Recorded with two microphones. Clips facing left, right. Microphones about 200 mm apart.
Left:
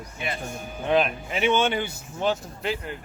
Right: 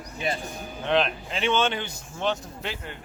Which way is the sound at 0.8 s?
5° left (ahead or behind).